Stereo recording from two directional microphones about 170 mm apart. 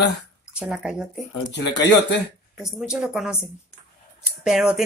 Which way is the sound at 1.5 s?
90° left.